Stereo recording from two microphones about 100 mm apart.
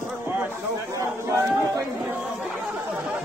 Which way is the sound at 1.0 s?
30° right (ahead or behind).